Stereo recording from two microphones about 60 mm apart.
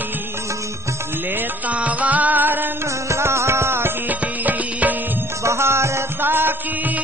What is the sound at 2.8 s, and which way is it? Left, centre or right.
Music, right.